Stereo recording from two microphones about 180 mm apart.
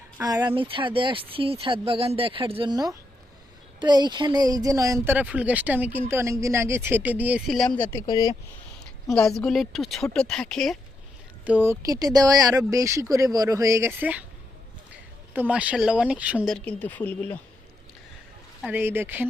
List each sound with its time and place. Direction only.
0.2 s speech: 20° right (ahead or behind)
5.1 s speech: 5° right (ahead or behind)
7.8 s speech: 15° left (ahead or behind)
9.0 s a woman's voice: 5° left (ahead or behind)
11.4 s speech: 10° right (ahead or behind)
15.3 s speech: 10° right (ahead or behind); by 17.4 s 10° left (ahead or behind)
18.6 s speech: 10° right (ahead or behind)